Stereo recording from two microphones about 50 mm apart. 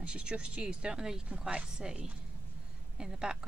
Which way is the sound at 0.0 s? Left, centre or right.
Right.